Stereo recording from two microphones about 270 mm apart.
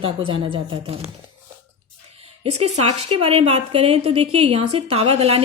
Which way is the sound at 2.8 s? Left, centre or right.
Right.